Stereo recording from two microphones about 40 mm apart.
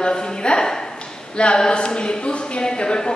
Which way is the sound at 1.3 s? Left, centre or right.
Left.